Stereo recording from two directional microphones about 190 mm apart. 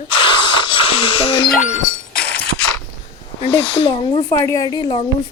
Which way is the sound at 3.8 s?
25° left (ahead or behind).